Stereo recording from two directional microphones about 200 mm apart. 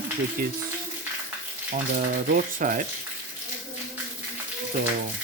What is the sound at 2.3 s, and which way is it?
Speech, 45° right (ahead or behind).